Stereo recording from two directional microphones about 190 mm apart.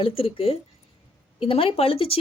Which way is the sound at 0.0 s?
30° left (ahead or behind).